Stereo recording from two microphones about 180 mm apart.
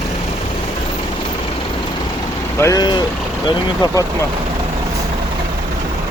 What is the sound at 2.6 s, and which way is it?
Speech, 20° left (ahead or behind).